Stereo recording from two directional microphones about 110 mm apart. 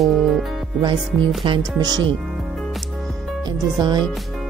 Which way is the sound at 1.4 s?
45° right (ahead or behind).